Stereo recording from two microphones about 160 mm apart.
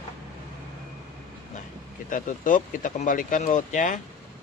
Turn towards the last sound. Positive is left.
turn(degrees=55)  # may be behind; listen again after turning